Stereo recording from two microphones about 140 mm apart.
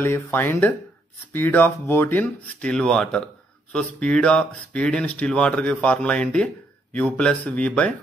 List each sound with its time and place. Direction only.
0.0 s speech: 15° left (ahead or behind)